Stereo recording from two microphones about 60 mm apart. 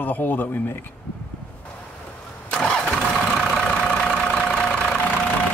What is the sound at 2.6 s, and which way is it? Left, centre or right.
Vehicle, centre.